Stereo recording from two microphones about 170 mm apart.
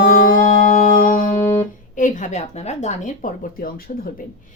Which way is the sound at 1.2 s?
10° left (ahead or behind).